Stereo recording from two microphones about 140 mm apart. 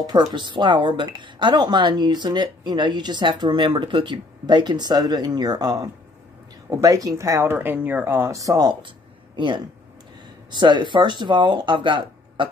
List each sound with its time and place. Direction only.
0.0 s speech: 30° right (ahead or behind)
10.5 s speech: 35° right (ahead or behind)